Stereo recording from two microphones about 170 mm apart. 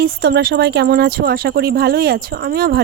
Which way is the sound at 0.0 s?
70° right (ahead or behind).